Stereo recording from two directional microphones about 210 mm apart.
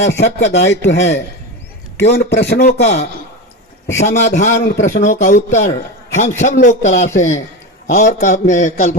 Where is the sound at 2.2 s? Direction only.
55° left (ahead or behind).